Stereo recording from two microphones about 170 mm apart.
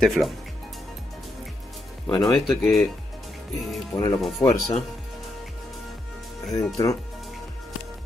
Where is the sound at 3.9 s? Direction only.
20° left (ahead or behind).